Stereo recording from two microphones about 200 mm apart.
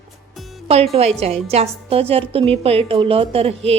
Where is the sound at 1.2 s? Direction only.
30° right (ahead or behind).